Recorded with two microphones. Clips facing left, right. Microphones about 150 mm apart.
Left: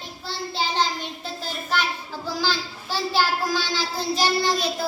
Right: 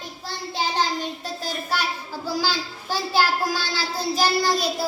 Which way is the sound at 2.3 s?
10° right (ahead or behind).